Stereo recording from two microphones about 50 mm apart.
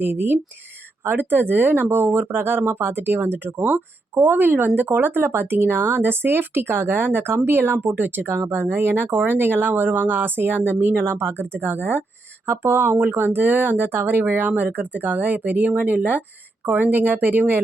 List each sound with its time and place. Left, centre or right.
0.0 s speech: right